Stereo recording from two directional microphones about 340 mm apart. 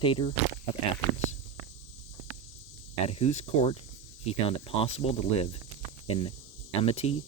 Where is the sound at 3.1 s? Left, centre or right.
Centre.